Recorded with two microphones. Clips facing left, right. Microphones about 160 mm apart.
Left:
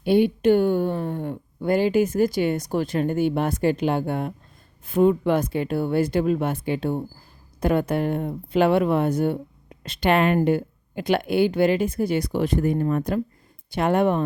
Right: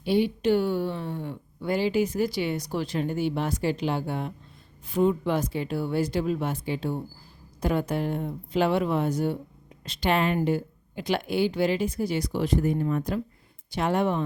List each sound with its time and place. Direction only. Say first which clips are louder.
0.0 s speech: left 5 dB; 55° left (ahead or behind)